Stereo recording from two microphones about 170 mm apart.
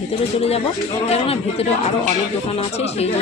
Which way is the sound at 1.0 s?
35° left (ahead or behind).